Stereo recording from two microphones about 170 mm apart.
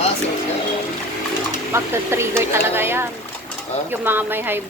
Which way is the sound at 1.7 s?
15° right (ahead or behind).